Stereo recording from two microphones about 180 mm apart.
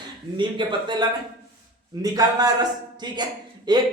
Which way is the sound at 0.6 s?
25° right (ahead or behind).